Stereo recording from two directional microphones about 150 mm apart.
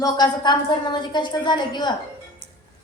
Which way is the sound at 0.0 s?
30° left (ahead or behind).